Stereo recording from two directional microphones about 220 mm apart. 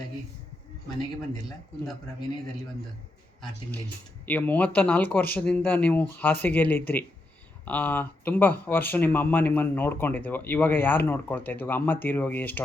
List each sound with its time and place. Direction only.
4.3 s speech: 5° left (ahead or behind)